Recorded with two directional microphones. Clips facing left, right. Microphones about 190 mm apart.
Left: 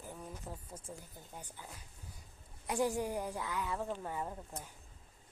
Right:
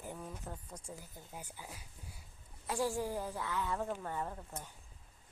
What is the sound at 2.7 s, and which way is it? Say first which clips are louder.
A woman's voice: left 1 dB; 20° left (ahead or behind).